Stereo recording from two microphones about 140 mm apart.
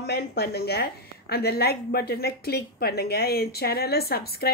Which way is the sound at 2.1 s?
90° left.